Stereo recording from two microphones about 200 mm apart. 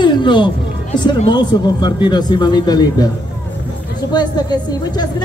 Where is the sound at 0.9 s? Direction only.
20° left (ahead or behind).